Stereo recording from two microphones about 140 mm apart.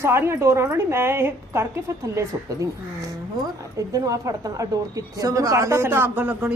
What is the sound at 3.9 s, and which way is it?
A woman's voice, 25° right (ahead or behind).